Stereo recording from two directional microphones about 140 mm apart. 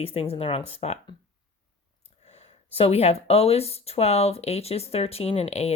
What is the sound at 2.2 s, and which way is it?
Speech, 50° left (ahead or behind).